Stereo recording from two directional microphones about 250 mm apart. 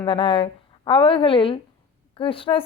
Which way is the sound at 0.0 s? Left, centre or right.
Left.